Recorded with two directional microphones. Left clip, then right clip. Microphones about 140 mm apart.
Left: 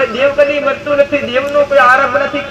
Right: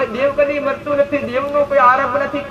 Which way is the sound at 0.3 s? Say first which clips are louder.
Left 5 dB; 35° right (ahead or behind).